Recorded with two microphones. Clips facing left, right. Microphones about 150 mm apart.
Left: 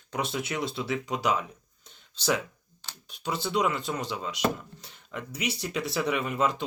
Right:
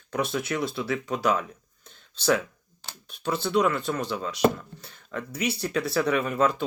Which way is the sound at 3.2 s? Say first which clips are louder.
Right 4 dB; 15° left (ahead or behind).